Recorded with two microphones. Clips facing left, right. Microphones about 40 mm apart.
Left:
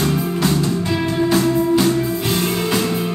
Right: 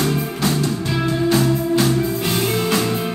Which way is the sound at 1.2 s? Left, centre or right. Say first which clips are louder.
Left 2 dB; centre.